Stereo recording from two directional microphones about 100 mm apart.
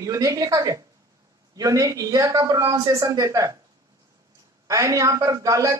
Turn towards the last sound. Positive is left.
turn(degrees=-30)  # may be behind; listen again after turning